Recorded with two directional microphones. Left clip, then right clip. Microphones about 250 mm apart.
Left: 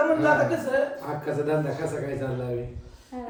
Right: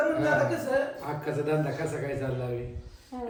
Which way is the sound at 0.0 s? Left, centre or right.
Centre.